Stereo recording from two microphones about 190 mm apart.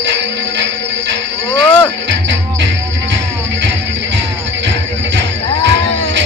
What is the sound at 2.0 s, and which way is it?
Music, 70° right (ahead or behind).